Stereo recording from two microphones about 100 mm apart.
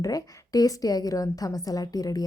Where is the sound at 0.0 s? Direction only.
40° left (ahead or behind).